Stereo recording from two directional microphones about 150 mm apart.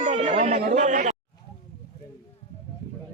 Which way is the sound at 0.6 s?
60° right (ahead or behind).